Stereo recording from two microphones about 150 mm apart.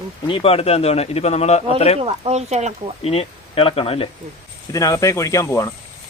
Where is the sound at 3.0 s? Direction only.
40° left (ahead or behind).